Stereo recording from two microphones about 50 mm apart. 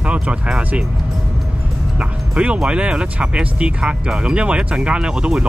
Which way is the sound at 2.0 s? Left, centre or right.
Right.